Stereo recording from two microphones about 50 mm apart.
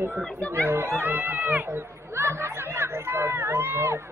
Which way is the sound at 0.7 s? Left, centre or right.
Right.